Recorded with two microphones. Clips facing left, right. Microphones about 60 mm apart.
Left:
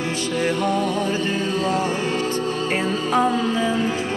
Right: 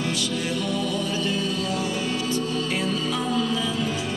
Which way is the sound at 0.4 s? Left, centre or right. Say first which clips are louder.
Left 6 dB; left.